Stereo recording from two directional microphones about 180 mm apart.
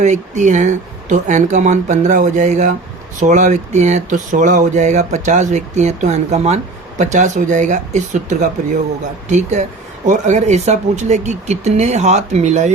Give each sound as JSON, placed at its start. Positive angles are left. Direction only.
{"t": 0.0, "sound": "speech", "side_deg": -40}